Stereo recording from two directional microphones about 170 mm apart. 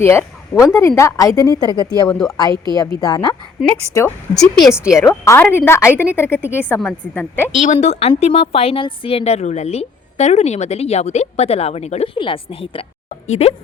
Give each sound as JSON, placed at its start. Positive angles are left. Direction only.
{"t": 0.0, "sound": "a woman's voice", "side_deg": 15}
{"t": 2.0, "sound": "speech", "side_deg": 0}
{"t": 2.4, "sound": "a woman's voice", "side_deg": 25}
{"t": 4.4, "sound": "speech", "side_deg": 0}
{"t": 5.0, "sound": "a woman's voice", "side_deg": 15}
{"t": 7.5, "sound": "a woman's voice", "side_deg": 40}